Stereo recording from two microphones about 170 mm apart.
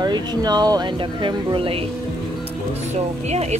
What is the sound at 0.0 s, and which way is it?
Speech, 25° right (ahead or behind).